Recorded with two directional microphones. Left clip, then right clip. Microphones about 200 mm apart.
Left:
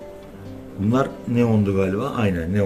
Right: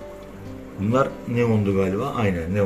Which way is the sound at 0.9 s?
25° left (ahead or behind).